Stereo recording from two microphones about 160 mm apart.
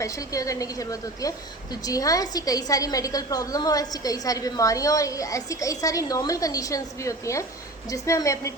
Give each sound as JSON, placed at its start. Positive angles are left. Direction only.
{"t": 0.0, "sound": "a woman's voice", "side_deg": 20}